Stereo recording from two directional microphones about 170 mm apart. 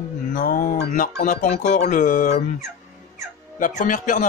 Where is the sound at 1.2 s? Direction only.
45° left (ahead or behind).